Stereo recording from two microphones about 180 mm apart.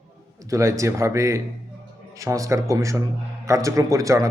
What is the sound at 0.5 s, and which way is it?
Speech, 15° right (ahead or behind).